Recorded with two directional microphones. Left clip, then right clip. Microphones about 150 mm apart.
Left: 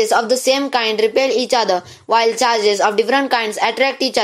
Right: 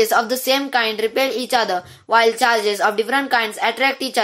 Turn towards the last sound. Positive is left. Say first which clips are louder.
# left 2 dB
turn(degrees=10)  # may be behind; listen again after turning